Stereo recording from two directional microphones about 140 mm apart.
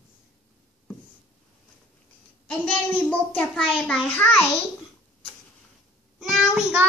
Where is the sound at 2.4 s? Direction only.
10° left (ahead or behind).